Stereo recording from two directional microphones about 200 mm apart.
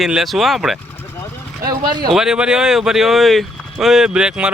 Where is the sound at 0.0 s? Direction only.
Centre (ahead or behind).